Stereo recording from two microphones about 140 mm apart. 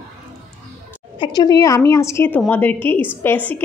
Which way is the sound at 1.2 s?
30° left (ahead or behind).